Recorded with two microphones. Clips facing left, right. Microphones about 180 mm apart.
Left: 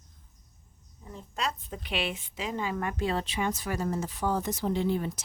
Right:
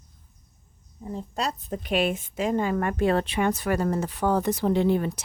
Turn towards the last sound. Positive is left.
turn(degrees=-65)  # may be behind; listen again after turning